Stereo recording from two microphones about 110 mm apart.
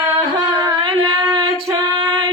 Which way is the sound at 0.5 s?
35° right (ahead or behind).